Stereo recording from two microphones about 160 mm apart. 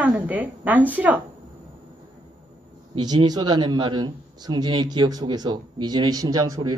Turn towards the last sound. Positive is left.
turn(degrees=-20)  # may be behind; listen again after turning